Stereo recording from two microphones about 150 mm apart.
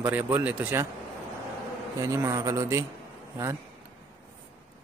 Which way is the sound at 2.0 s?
20° right (ahead or behind).